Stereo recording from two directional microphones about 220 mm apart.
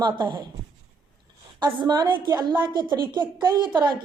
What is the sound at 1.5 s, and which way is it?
A woman's voice, 20° right (ahead or behind).